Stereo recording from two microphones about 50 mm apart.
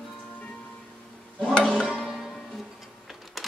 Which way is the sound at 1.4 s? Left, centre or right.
Left.